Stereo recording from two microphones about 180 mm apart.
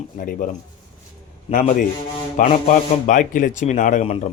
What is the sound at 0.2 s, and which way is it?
Speech, 50° left (ahead or behind).